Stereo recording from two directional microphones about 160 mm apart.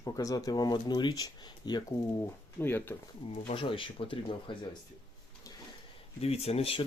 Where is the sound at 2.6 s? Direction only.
15° left (ahead or behind).